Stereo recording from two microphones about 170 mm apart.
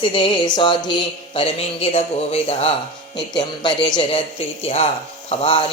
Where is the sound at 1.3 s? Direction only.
35° left (ahead or behind).